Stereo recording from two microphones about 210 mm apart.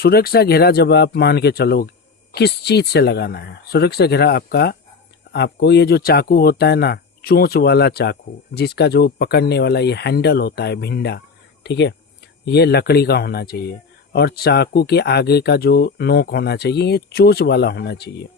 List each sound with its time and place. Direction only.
0.0 s speech: 45° left (ahead or behind)